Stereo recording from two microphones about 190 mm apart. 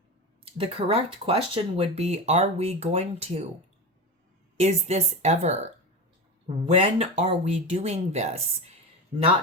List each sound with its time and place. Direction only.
0.5 s speech: 30° right (ahead or behind)
4.5 s speech: 35° right (ahead or behind)
6.7 s speech: 30° right (ahead or behind)